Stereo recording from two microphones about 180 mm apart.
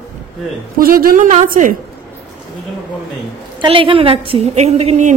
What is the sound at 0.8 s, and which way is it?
Speech, 55° right (ahead or behind).